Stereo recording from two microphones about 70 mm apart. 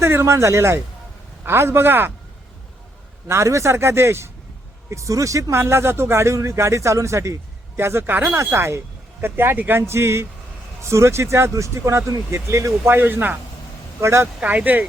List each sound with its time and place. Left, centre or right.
0.0 s speech: right
3.2 s speech: right
5.5 s speech: right
12.8 s speech: right
14.0 s speech: right
14.4 s speech: right